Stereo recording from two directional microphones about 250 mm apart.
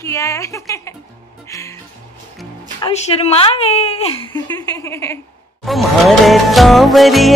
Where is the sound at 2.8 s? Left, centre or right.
Left.